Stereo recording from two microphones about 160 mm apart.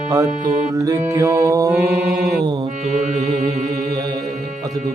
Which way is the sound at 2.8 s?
45° right (ahead or behind).